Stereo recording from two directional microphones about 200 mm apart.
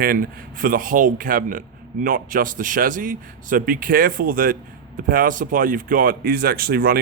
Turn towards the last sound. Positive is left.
turn(degrees=-50)  # may be behind; listen again after turning